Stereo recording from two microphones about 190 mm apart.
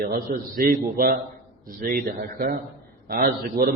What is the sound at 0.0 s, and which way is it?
A man's voice, 50° right (ahead or behind).